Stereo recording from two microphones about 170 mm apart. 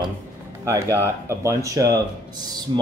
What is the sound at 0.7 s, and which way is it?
Speech, 15° right (ahead or behind).